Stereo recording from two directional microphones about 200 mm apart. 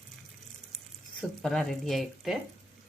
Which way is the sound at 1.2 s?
Centre (ahead or behind).